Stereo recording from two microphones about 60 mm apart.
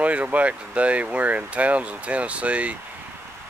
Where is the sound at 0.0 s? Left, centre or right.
Right.